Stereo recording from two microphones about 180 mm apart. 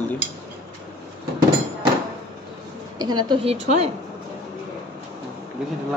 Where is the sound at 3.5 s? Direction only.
35° right (ahead or behind).